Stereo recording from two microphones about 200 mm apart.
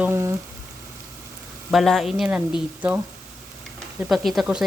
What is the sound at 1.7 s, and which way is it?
Frying, centre (ahead or behind).